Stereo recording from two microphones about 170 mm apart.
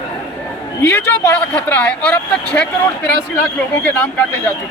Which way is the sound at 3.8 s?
10° left (ahead or behind).